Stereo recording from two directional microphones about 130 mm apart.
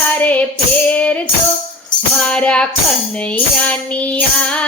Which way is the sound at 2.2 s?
10° left (ahead or behind).